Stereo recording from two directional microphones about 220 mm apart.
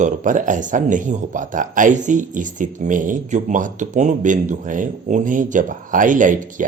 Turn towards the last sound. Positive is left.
turn(degrees=-35)  # may be behind; listen again after turning